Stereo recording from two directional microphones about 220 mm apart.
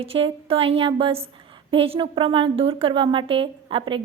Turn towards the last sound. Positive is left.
turn(degrees=-25)  # may be behind; listen again after turning